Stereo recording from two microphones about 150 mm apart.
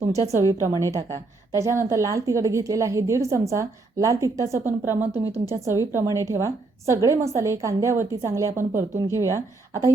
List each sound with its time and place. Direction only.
0.0 s a woman's voice: 20° right (ahead or behind)